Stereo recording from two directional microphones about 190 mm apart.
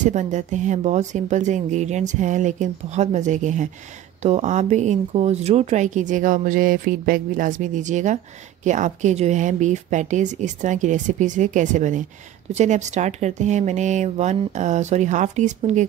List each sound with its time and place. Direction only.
0.0 s speech: 40° right (ahead or behind)